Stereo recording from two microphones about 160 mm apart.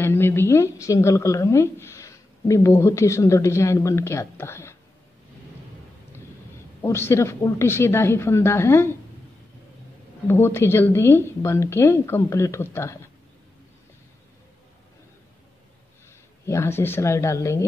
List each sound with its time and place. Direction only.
0.0 s a woman's voice: 15° left (ahead or behind)
6.8 s a woman's voice: 15° left (ahead or behind)
10.2 s a woman's voice: 15° left (ahead or behind)
16.4 s a woman's voice: 15° left (ahead or behind)